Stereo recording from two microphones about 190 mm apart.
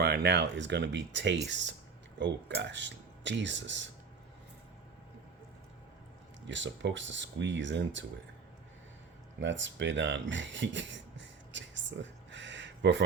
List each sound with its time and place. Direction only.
0.0 s speech: 60° right (ahead or behind)
6.5 s speech: 75° right (ahead or behind)
9.4 s speech: 75° right (ahead or behind)